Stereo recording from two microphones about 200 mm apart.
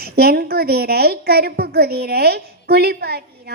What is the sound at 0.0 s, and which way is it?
A woman's voice, 50° right (ahead or behind).